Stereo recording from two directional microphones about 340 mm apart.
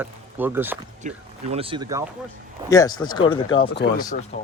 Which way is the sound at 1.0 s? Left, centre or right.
Centre.